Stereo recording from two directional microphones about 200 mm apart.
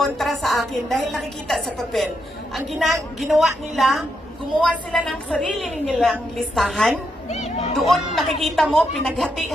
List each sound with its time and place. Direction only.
0.0 s a woman's voice: centre (ahead or behind)
7.2 s chatter: 30° left (ahead or behind)
7.9 s a woman's voice: centre (ahead or behind)